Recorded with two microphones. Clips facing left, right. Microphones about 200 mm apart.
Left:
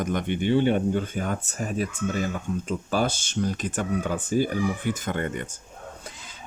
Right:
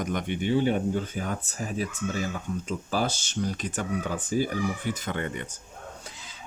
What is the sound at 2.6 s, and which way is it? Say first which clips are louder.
Speech: left 3 dB; 55° left (ahead or behind).